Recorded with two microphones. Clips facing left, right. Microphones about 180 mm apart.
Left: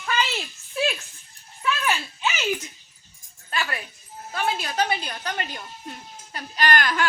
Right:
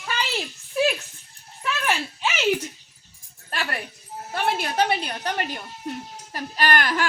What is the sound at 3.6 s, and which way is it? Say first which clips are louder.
Dog: even; 55° right (ahead or behind).